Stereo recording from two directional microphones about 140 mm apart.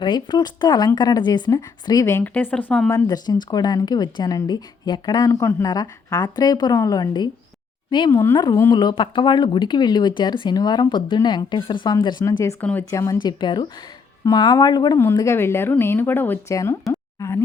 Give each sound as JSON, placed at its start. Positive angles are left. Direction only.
{"t": 0.0, "sound": "speech", "side_deg": 30}
{"t": 2.9, "sound": "speech", "side_deg": 30}
{"t": 8.1, "sound": "a woman's voice", "side_deg": 15}
{"t": 8.7, "sound": "speech", "side_deg": 30}
{"t": 12.2, "sound": "a woman's voice", "side_deg": 20}
{"t": 16.9, "sound": "plop", "side_deg": 20}